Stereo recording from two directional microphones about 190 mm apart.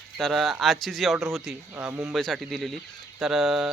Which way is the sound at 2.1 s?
Centre (ahead or behind).